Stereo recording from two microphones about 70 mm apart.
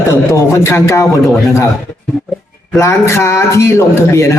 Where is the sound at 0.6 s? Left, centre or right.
Left.